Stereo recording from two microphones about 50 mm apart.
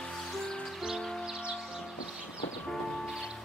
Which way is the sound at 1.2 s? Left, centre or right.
Centre.